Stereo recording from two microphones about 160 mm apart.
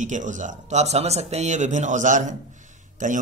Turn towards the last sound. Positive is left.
turn(degrees=-50)  # may be behind; listen again after turning